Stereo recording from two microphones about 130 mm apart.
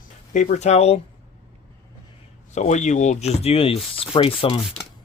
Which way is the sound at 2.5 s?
65° left (ahead or behind).